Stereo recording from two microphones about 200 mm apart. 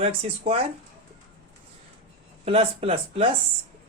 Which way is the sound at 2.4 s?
30° right (ahead or behind).